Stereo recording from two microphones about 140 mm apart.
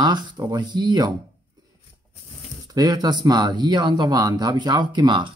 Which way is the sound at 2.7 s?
25° right (ahead or behind).